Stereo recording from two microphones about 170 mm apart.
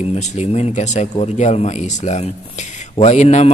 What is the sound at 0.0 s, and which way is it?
Speech, 40° left (ahead or behind).